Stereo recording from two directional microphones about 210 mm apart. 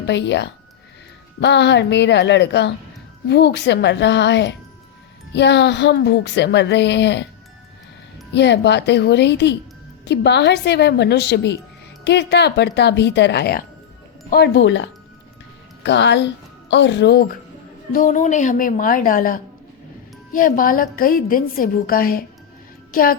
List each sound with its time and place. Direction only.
0.0 s a woman's voice: 55° left (ahead or behind)
8.3 s a woman's voice: 55° left (ahead or behind)
17.9 s a woman's voice: 40° left (ahead or behind)